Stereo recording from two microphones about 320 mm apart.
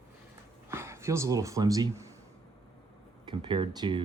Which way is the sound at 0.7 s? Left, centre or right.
Centre.